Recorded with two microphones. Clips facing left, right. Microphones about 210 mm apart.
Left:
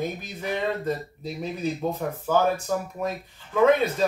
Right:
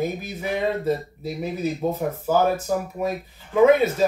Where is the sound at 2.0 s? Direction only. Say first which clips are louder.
Right 4 dB; 10° right (ahead or behind).